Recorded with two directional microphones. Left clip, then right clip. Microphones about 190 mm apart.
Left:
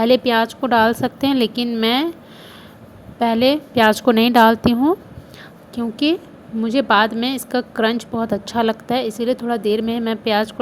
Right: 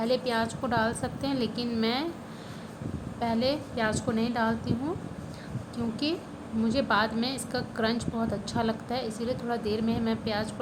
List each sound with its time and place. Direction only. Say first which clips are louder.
0.0 s a woman's voice: left 12 dB; 40° left (ahead or behind)
3.2 s a woman's voice: left 12 dB; 40° left (ahead or behind)